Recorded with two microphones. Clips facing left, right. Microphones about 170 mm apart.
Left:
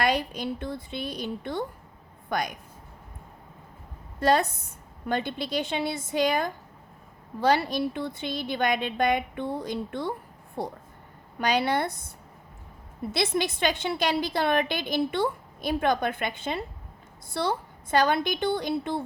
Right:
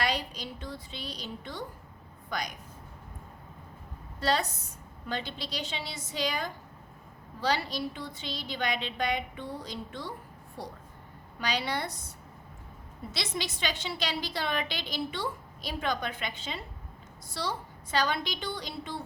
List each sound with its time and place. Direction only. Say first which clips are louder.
0.0 s a woman's voice: left 6 dB; 55° left (ahead or behind)
4.2 s a woman's voice: left 6 dB; 55° left (ahead or behind)